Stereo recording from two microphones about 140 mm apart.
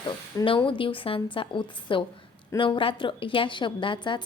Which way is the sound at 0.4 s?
40° left (ahead or behind).